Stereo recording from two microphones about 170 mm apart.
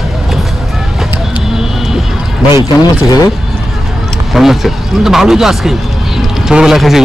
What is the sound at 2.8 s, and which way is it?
Speech, 20° left (ahead or behind).